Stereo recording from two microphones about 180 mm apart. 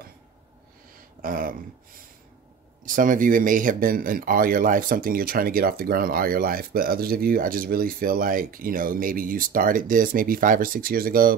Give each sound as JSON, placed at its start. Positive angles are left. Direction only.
{"t": 1.2, "sound": "speech", "side_deg": -50}
{"t": 2.8, "sound": "speech", "side_deg": -50}